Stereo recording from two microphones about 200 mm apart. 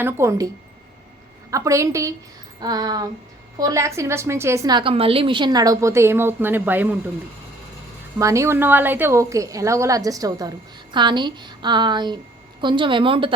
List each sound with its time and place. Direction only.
0.0 s a woman's voice: 15° right (ahead or behind)
8.2 s a woman's voice: 15° right (ahead or behind)